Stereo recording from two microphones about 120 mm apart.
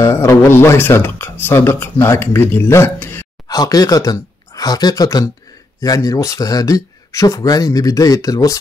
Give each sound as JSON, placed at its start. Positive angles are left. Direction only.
{"t": 0.0, "sound": "speech", "side_deg": 25}
{"t": 3.4, "sound": "speech", "side_deg": 30}